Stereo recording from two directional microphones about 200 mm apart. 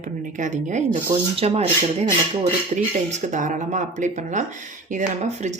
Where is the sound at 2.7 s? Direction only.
35° right (ahead or behind).